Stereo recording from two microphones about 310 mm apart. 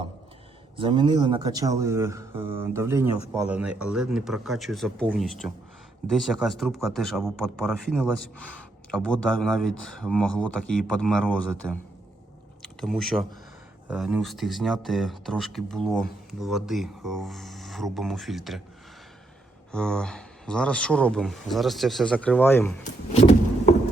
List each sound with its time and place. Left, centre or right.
0.8 s a man's voice: centre
19.7 s a man's voice: centre
23.1 s vehicle: centre